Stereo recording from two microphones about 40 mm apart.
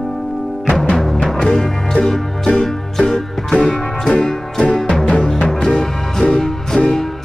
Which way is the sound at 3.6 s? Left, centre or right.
Left.